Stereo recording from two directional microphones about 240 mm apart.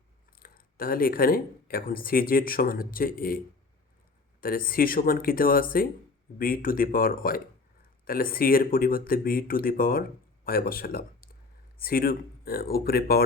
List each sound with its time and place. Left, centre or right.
0.3 s speech: left